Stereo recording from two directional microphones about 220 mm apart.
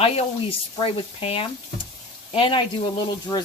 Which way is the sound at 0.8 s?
25° left (ahead or behind).